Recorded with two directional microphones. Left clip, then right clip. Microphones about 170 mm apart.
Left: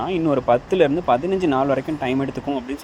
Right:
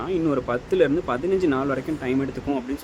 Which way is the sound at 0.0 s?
15° left (ahead or behind).